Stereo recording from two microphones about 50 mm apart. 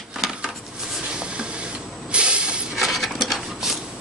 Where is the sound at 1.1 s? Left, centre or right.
Centre.